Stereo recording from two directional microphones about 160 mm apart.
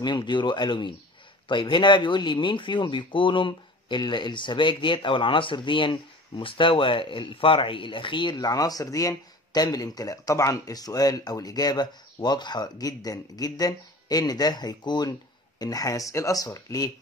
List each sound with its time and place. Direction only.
0.0 s speech: 30° left (ahead or behind)